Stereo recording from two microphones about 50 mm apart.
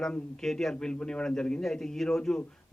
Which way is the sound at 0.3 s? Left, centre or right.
Centre.